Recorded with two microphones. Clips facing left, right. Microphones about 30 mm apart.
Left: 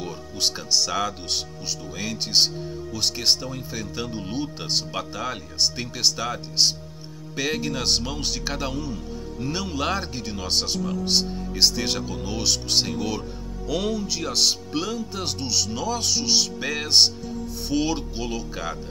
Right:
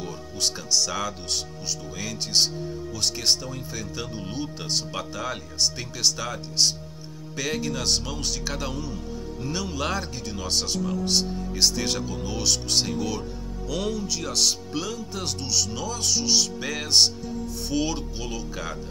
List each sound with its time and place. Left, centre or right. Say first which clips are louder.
0.0 s speech: left 2 dB; centre
10.8 s speech: even; centre
11.1 s speech: left 1 dB; centre